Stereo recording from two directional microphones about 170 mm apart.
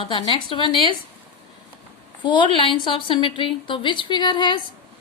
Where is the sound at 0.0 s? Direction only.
35° left (ahead or behind).